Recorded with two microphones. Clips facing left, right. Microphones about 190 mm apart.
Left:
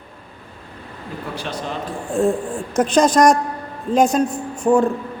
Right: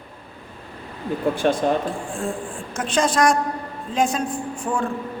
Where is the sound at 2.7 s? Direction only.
40° left (ahead or behind).